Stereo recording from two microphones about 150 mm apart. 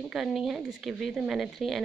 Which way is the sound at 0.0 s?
Centre (ahead or behind).